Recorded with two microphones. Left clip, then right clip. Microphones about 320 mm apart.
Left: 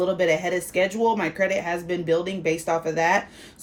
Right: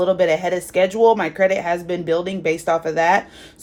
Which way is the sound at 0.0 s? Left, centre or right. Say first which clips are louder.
Right 5 dB; right.